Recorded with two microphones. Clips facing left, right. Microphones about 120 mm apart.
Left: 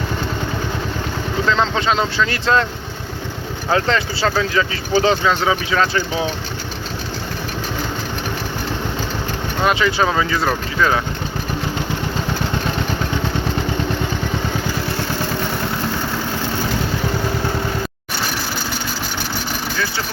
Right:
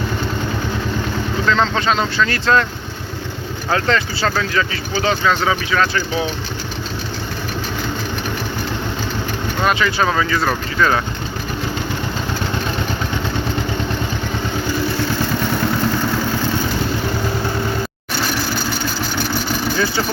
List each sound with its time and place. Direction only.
1.5 s speech: 15° left (ahead or behind)
3.7 s speech: 20° left (ahead or behind)
9.6 s speech: 20° left (ahead or behind)